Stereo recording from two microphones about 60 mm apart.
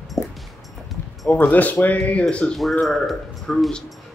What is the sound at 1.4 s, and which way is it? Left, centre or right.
Speech, left.